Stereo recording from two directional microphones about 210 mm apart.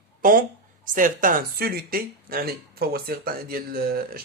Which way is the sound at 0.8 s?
40° right (ahead or behind).